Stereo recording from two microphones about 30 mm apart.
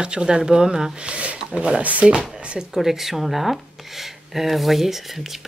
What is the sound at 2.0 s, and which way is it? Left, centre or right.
Speech, right.